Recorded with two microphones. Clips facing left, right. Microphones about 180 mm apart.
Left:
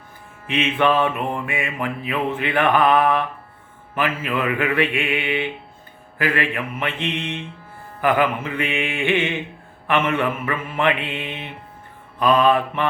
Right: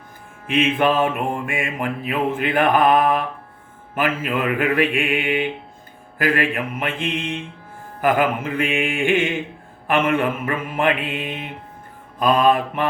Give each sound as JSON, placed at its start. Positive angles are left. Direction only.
{"t": 0.4, "sound": "mantra", "side_deg": -50}
{"t": 7.2, "sound": "mantra", "side_deg": 0}
{"t": 8.0, "sound": "mantra", "side_deg": -45}